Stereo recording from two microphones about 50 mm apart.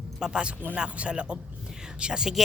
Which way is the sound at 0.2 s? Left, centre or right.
Centre.